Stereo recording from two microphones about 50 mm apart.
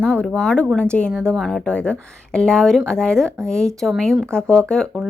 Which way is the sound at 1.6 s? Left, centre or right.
Centre.